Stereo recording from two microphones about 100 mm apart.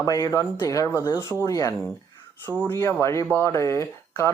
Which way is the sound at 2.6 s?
25° left (ahead or behind).